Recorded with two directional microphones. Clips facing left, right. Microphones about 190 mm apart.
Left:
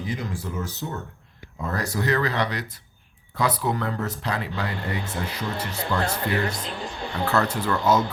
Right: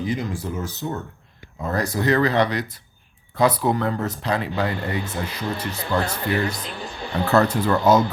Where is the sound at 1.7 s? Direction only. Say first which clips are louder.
Right 4 dB; 20° right (ahead or behind).